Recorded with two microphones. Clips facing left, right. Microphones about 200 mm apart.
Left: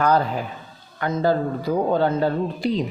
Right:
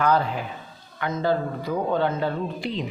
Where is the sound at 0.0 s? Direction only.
40° left (ahead or behind).